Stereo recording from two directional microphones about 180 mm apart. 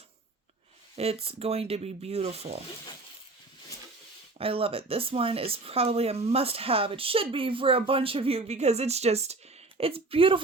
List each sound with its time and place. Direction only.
0.9 s speech: 35° right (ahead or behind)
4.4 s speech: 30° right (ahead or behind)